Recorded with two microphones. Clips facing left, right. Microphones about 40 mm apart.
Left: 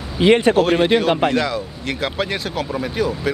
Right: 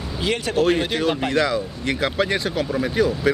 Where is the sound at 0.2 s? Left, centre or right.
Left.